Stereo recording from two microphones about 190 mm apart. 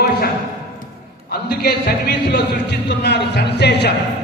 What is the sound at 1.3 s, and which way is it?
A man's voice, 55° left (ahead or behind).